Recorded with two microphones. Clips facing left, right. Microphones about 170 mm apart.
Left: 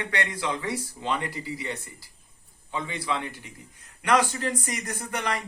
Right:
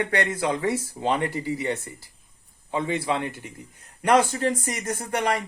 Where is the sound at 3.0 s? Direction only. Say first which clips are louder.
Right 4 dB; 45° right (ahead or behind).